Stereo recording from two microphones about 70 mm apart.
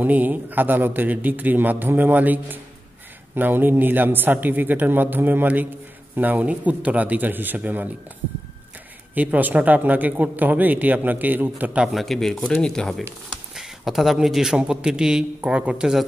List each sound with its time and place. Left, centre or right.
0.0 s speech: right
9.1 s speech: right
11.9 s speech: centre
13.6 s a sound: centre
14.1 s speech: centre